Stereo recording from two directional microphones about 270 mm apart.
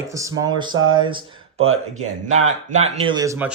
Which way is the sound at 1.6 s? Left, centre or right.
Right.